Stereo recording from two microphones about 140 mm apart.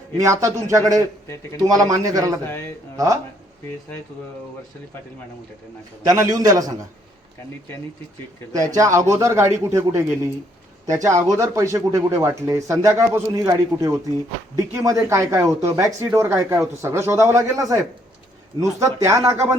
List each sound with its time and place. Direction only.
0.2 s speech: 20° right (ahead or behind)
6.1 s speech: 25° right (ahead or behind)
8.5 s speech: 25° right (ahead or behind)